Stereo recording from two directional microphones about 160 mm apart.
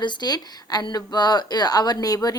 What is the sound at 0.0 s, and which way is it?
A woman's voice, 25° left (ahead or behind).